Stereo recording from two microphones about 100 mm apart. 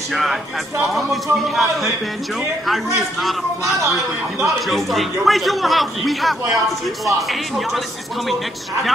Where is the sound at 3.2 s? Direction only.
Centre (ahead or behind).